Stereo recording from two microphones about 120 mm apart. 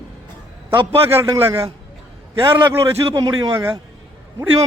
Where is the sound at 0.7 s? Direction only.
55° right (ahead or behind).